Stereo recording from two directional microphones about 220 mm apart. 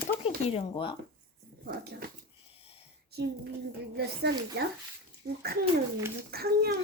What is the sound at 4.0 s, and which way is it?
A child's voice, 50° right (ahead or behind).